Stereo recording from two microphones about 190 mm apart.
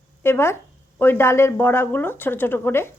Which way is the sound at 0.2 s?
15° left (ahead or behind).